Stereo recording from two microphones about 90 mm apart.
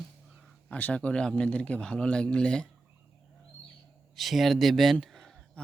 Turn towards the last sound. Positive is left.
turn(degrees=5)  # may be behind; listen again after turning